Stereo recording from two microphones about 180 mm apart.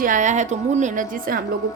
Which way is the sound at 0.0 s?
45° right (ahead or behind).